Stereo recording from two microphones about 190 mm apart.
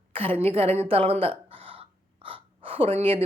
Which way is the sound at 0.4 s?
30° right (ahead or behind).